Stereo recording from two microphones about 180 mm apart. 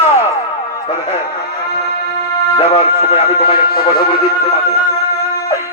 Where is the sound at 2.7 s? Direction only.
35° left (ahead or behind).